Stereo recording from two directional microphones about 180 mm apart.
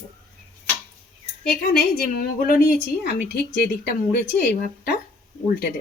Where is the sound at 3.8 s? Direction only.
60° left (ahead or behind).